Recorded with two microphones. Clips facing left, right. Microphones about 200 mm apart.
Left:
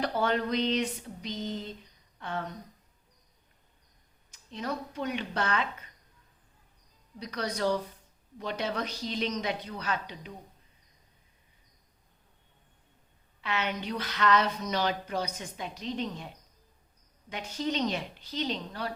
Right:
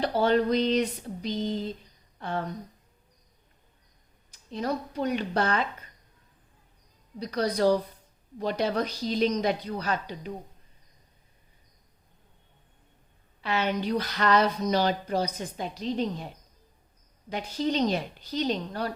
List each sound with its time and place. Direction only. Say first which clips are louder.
0.0 s speech: right 5 dB; 30° right (ahead or behind)
2.1 s a sound: right 4 dB; 35° right (ahead or behind)
4.3 s speech: right 5 dB; 35° right (ahead or behind)
7.2 s speech: right 6 dB; 35° right (ahead or behind)
13.4 s speech: right 5 dB; 35° right (ahead or behind)